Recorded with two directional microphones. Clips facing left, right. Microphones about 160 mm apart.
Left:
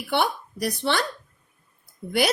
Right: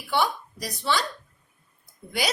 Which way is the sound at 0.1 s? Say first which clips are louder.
Left 1 dB; 65° left (ahead or behind).